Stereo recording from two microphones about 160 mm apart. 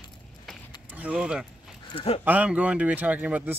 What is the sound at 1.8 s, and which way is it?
Speech, 35° left (ahead or behind).